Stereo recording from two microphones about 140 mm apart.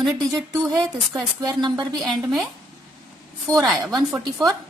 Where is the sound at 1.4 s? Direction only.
30° right (ahead or behind).